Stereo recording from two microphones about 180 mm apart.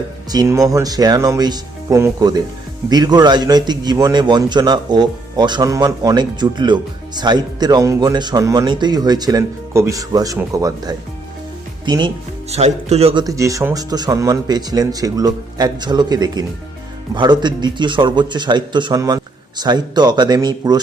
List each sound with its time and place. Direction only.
0.3 s a man's voice: 20° right (ahead or behind)
13.2 s a man's voice: 15° right (ahead or behind)